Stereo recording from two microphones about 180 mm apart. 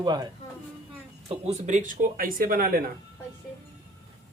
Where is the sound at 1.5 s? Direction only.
40° right (ahead or behind).